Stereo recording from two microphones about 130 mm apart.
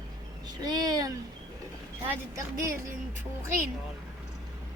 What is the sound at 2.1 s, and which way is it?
Speech, 20° right (ahead or behind).